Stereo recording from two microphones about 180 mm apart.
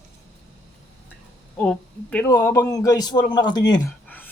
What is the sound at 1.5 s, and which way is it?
Speech, 5° left (ahead or behind).